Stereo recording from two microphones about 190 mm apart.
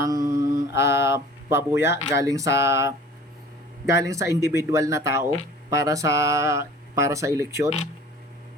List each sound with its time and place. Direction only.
0.0 s mantra: 20° right (ahead or behind)
2.2 s speech: 15° right (ahead or behind)